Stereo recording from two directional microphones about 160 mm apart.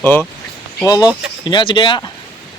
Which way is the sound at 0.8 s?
25° left (ahead or behind).